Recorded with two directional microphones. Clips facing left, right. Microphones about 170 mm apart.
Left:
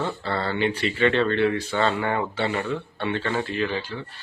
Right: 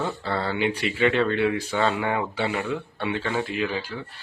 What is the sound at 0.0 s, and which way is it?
Speech, 5° right (ahead or behind).